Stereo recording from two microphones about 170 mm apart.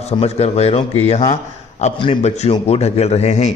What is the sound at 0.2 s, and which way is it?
A man's voice, 40° left (ahead or behind).